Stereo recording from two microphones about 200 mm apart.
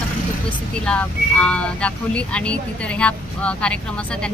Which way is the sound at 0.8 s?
5° left (ahead or behind).